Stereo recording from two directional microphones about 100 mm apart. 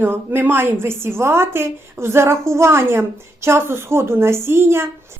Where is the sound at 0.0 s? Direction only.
20° right (ahead or behind).